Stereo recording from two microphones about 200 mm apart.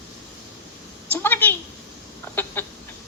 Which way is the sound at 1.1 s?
10° left (ahead or behind).